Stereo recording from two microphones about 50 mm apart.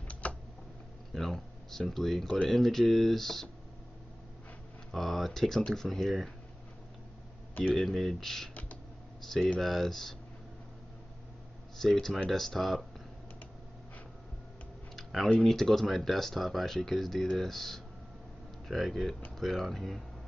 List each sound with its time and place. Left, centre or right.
0.1 s computer keyboard: left
1.1 s speech: centre
4.9 s speech: centre
7.7 s speech: centre
11.8 s speech: centre
15.0 s tick-tock: centre
15.4 s speech: centre